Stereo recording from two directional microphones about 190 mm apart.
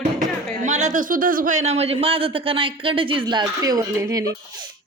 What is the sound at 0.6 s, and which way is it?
A man's voice, 40° right (ahead or behind).